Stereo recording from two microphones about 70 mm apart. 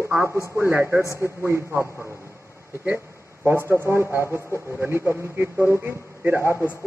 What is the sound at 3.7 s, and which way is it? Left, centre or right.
A man's voice, right.